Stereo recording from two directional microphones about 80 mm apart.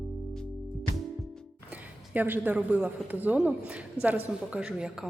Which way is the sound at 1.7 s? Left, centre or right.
Right.